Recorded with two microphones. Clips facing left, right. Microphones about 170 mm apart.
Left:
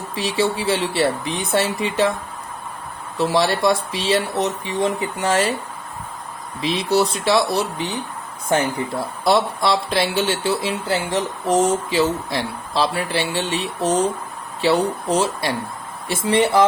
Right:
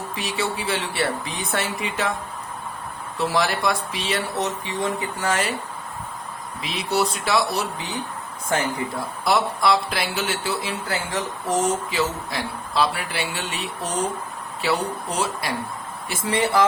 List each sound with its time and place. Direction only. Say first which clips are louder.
0.1 s speech: left 8 dB; 30° left (ahead or behind)
3.2 s speech: left 4 dB; 25° left (ahead or behind)
6.6 s speech: left 5 dB; 25° left (ahead or behind)
9.2 s speech: left 2 dB; 25° left (ahead or behind)